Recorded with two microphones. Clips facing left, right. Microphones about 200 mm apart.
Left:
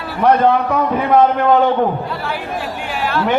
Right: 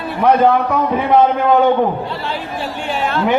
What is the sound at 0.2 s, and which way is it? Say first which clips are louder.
Speech: even; centre (ahead or behind).